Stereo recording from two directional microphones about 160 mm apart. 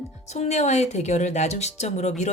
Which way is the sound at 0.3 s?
45° left (ahead or behind).